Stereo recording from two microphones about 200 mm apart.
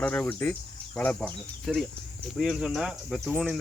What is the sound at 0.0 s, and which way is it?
Speech, 10° left (ahead or behind).